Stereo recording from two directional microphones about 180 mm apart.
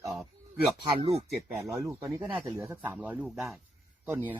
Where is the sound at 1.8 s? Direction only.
15° right (ahead or behind).